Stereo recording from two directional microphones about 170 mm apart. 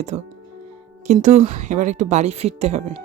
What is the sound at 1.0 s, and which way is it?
Speech, 45° right (ahead or behind).